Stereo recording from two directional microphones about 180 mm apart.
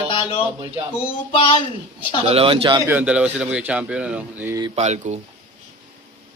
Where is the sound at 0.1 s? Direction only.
30° left (ahead or behind).